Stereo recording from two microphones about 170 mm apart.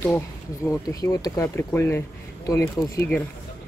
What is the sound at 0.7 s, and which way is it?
Speech, 20° left (ahead or behind).